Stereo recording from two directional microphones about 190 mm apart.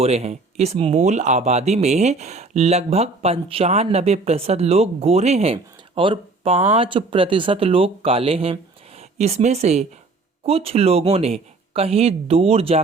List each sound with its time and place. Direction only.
0.0 s speech: 35° right (ahead or behind)